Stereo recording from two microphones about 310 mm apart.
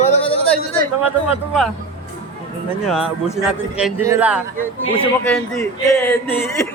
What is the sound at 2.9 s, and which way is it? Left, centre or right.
A man's voice, centre.